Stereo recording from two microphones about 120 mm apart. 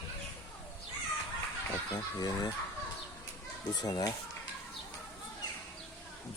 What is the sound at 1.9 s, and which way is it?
Speech, 30° left (ahead or behind).